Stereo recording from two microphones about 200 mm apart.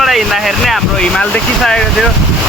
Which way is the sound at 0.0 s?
Centre (ahead or behind).